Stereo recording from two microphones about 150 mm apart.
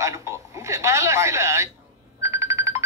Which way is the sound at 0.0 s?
20° right (ahead or behind).